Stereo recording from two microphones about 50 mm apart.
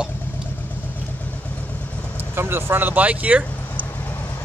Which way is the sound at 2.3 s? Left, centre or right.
Right.